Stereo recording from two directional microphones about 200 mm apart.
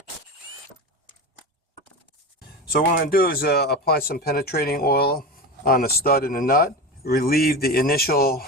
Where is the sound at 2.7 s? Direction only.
45° left (ahead or behind).